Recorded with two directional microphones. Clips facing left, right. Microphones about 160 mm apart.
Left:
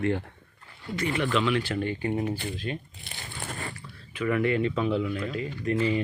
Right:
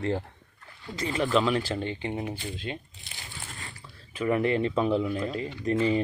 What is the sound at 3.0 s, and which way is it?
Crumpling, 60° left (ahead or behind).